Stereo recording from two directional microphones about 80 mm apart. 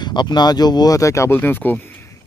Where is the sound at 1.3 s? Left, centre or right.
Left.